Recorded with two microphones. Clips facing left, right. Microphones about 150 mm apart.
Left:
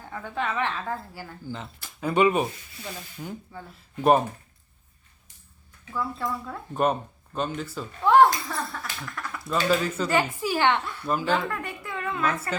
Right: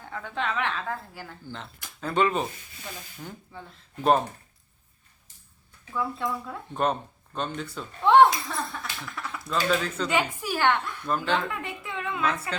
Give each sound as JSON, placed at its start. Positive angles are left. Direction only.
{"t": 0.1, "sound": "speech", "side_deg": 10}
{"t": 5.9, "sound": "a child's voice", "side_deg": 0}